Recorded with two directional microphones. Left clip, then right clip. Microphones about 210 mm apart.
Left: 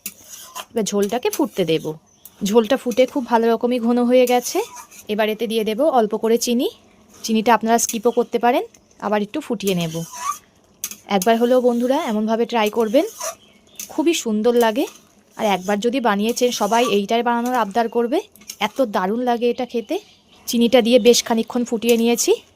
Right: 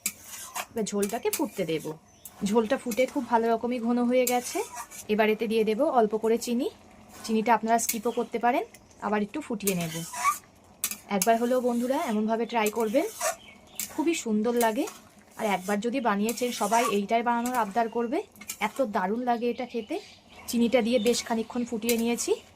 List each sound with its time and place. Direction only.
0.7 s speech: 50° left (ahead or behind)
5.0 s speech: 40° left (ahead or behind)
11.3 s speech: 50° left (ahead or behind)